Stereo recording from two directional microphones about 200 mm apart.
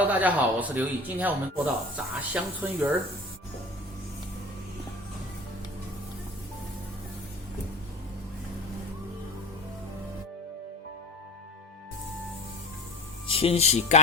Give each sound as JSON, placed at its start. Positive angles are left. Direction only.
{"t": 0.0, "sound": "speech", "side_deg": -10}
{"t": 13.2, "sound": "speech", "side_deg": 30}